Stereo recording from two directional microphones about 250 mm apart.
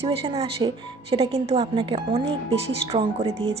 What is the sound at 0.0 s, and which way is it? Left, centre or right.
A woman's voice, right.